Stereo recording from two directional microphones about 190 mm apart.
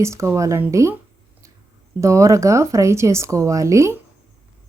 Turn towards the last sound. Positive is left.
turn(degrees=-15)  # may be behind; listen again after turning